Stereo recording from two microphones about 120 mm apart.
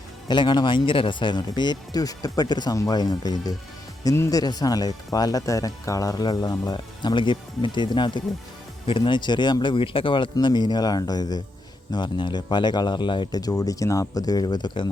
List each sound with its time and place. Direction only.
0.3 s speech: 40° left (ahead or behind)
10.3 s speech: 35° left (ahead or behind)